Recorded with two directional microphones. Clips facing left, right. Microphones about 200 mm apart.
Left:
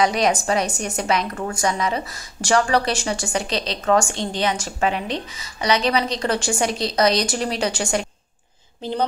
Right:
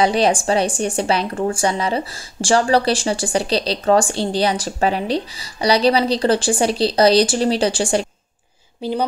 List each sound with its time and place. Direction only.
0.0 s a woman's voice: 30° right (ahead or behind)
8.8 s speech: 10° right (ahead or behind)